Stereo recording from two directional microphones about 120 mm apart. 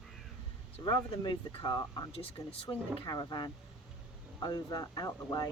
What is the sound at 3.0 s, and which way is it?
Speech, 35° left (ahead or behind).